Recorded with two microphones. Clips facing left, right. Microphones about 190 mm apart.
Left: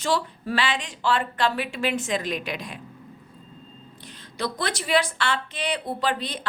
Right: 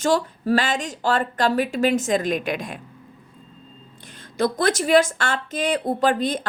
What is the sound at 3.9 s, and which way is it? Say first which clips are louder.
A woman's voice: right 9 dB; 50° right (ahead or behind).